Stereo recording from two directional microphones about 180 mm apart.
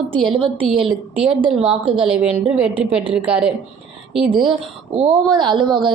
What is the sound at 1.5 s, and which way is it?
A woman's voice, 5° right (ahead or behind).